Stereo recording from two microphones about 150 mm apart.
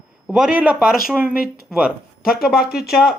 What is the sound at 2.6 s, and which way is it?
Speech, 90° left.